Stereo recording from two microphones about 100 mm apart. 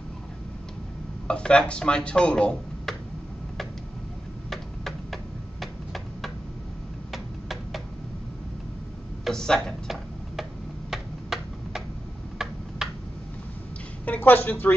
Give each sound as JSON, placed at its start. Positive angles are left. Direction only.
{"t": 1.2, "sound": "speech", "side_deg": 10}
{"t": 4.5, "sound": "a sound", "side_deg": 0}
{"t": 7.1, "sound": "tick-tock", "side_deg": 0}
{"t": 9.2, "sound": "tick-tock", "side_deg": 5}
{"t": 10.9, "sound": "a sound", "side_deg": -5}
{"t": 12.4, "sound": "tick-tock", "side_deg": -5}
{"t": 14.0, "sound": "speech", "side_deg": 15}